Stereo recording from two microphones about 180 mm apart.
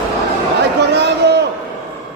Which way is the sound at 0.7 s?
70° right (ahead or behind).